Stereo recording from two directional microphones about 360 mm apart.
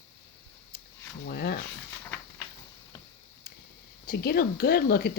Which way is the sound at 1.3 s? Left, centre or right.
Left.